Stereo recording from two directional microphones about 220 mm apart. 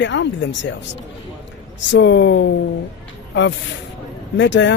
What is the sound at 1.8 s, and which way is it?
Speech, 55° left (ahead or behind).